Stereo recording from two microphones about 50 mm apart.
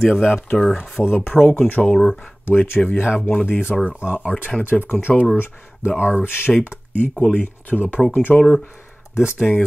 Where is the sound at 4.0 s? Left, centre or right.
Right.